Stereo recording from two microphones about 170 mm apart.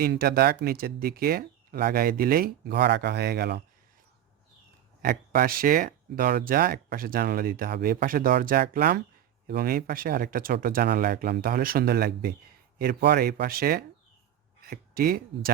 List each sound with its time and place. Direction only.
0.0 s speech: 65° right (ahead or behind)
5.0 s speech: 60° right (ahead or behind)